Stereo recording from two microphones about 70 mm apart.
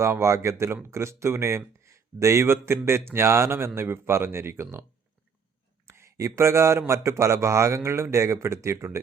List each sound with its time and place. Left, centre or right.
0.0 s a man's voice: right
5.9 s a man's voice: right